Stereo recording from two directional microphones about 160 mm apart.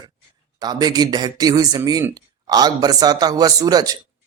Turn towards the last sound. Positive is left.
turn(degrees=-25)  # may be behind; listen again after turning